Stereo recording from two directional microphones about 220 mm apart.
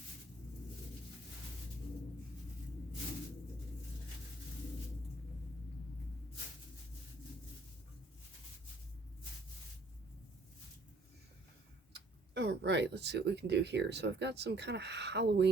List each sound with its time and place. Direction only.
11.9 s speech: 50° right (ahead or behind)